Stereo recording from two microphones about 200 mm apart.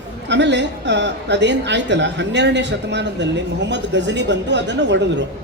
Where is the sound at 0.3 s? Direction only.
60° right (ahead or behind).